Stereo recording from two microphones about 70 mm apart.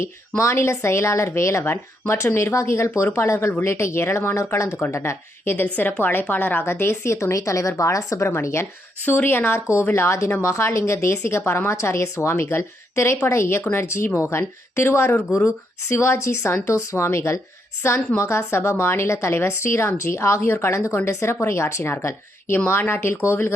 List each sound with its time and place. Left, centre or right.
0.0 s a woman's voice: left
9.0 s a woman's voice: left